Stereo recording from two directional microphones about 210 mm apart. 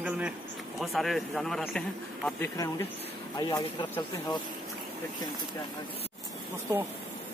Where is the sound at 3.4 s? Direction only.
20° left (ahead or behind).